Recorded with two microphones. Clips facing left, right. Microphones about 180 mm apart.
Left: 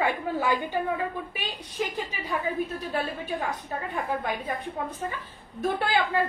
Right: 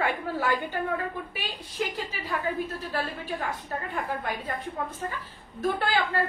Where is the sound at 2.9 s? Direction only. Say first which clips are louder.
Left 2 dB; 20° left (ahead or behind).